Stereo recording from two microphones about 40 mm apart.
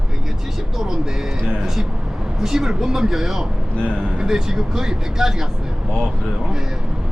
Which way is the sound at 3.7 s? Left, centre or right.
Left.